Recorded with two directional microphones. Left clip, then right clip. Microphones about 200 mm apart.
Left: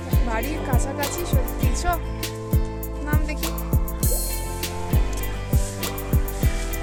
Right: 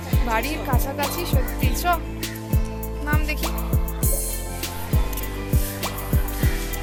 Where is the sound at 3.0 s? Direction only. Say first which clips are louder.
Right 3 dB; 15° left (ahead or behind).